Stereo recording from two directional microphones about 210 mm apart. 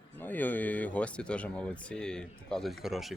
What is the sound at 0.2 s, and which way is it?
Speech, 10° left (ahead or behind).